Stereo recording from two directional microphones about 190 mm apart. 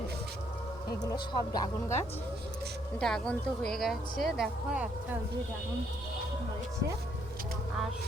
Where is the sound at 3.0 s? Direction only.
5° left (ahead or behind).